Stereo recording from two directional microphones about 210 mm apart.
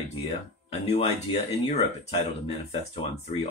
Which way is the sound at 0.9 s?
30° left (ahead or behind).